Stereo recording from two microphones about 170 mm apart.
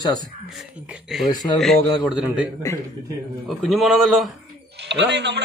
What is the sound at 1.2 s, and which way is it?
Speech, 25° left (ahead or behind).